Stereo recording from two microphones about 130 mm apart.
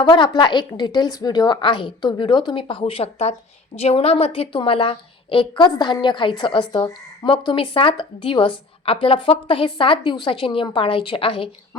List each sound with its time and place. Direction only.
0.0 s a woman's voice: 40° left (ahead or behind)